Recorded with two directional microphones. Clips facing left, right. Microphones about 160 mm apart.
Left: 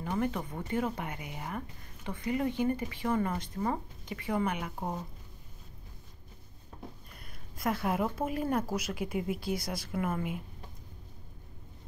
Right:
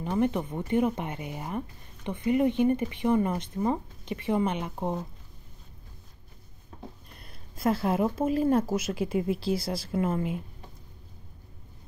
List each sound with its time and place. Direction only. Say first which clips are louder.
0.0 s speech: right 6 dB; 20° right (ahead or behind)
7.2 s speech: right 6 dB; 30° right (ahead or behind)